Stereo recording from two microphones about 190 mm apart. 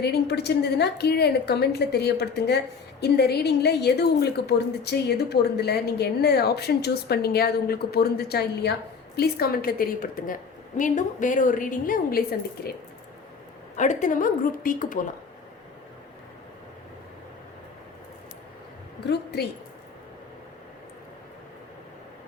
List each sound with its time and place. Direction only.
0.0 s a woman's voice: 60° left (ahead or behind)
13.7 s a woman's voice: 40° left (ahead or behind)
19.0 s a woman's voice: 60° left (ahead or behind)